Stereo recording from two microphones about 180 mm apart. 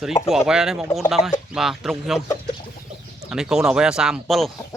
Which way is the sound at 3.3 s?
5° right (ahead or behind).